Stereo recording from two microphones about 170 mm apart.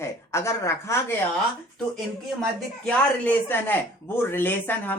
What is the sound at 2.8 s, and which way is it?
Speech, 10° left (ahead or behind).